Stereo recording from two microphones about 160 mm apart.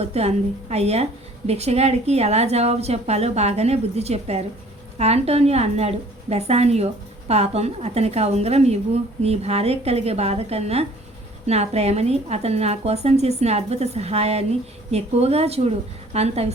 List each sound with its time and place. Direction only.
0.0 s a woman's voice: 40° right (ahead or behind)